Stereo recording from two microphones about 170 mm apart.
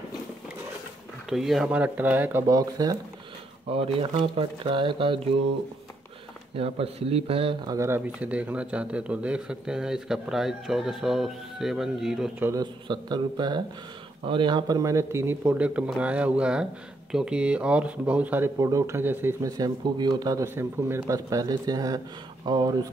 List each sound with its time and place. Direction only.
1.3 s speech: centre (ahead or behind)
2.4 s speech: 20° right (ahead or behind)
3.7 s speech: 35° right (ahead or behind)
6.5 s speech: 35° right (ahead or behind)
7.7 s a man's voice: 15° right (ahead or behind)
12.4 s speech: 25° right (ahead or behind)